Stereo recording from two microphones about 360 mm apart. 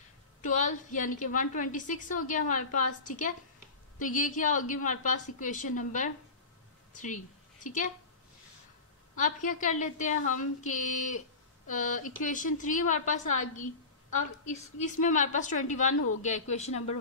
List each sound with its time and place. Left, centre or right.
0.4 s a woman's voice: left
9.1 s a woman's voice: left
14.4 s a woman's voice: centre
15.9 s speech: left
16.2 s a woman's voice: centre